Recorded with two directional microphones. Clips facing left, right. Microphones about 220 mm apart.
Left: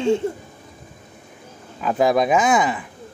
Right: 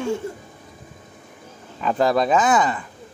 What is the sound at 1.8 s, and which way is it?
Speech, 10° left (ahead or behind).